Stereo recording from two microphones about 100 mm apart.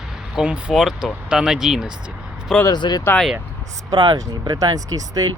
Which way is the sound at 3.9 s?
50° right (ahead or behind).